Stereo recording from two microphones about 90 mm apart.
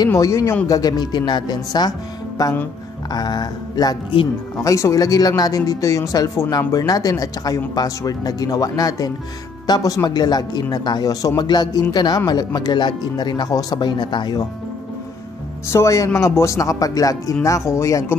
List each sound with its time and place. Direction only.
0.1 s speech: 35° left (ahead or behind)
0.7 s speech: 45° left (ahead or behind)
4.6 s speech: 35° left (ahead or behind); by 14.4 s 55° left (ahead or behind)
15.7 s speech: 35° left (ahead or behind)